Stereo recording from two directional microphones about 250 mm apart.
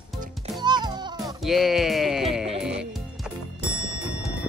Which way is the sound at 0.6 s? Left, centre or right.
Centre.